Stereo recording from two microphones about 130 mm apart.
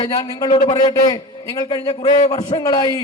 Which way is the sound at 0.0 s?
30° left (ahead or behind).